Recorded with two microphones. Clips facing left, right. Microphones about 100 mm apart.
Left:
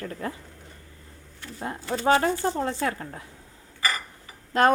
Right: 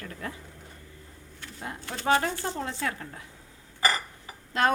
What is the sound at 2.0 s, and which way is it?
Speech, 40° left (ahead or behind).